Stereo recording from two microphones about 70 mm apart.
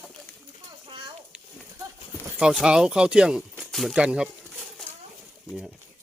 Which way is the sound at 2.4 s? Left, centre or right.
Centre.